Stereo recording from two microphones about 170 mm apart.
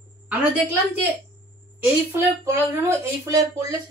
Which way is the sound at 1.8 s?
15° right (ahead or behind).